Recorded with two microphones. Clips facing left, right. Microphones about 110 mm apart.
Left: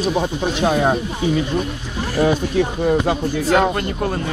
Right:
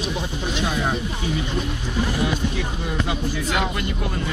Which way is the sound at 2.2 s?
40° left (ahead or behind).